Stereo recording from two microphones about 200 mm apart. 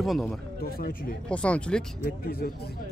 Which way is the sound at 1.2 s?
5° left (ahead or behind).